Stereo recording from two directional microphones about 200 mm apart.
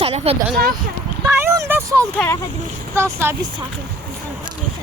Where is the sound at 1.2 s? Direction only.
15° right (ahead or behind).